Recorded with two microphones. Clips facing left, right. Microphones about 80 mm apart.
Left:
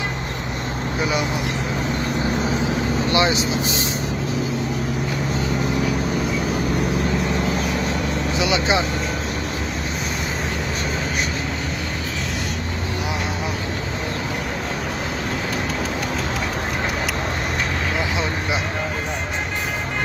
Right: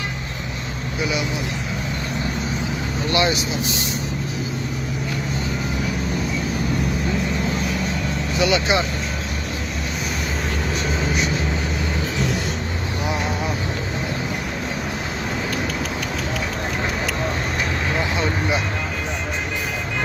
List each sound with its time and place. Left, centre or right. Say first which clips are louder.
3.1 s speech: even; left
8.4 s speech: right 2 dB; centre
17.9 s vehicle: right 1 dB; centre